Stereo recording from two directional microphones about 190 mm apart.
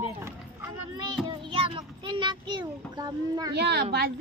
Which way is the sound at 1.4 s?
25° right (ahead or behind).